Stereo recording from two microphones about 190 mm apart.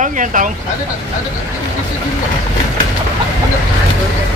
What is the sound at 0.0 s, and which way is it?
Speech, 45° right (ahead or behind).